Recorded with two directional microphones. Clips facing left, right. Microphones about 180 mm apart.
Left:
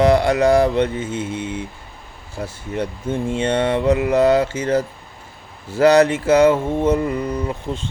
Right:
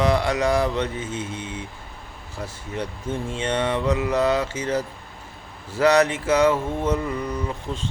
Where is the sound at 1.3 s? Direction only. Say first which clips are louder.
Left 7 dB; 90° left.